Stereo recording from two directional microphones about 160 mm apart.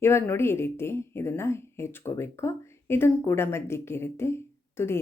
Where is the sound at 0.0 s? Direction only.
15° left (ahead or behind).